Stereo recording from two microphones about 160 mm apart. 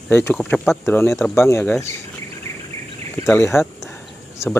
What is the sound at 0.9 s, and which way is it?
Speech, 15° left (ahead or behind).